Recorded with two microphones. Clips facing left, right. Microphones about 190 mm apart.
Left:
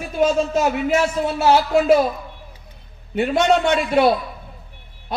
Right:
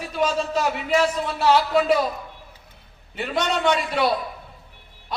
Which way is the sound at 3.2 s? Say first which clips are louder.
Left 6 dB; 50° left (ahead or behind).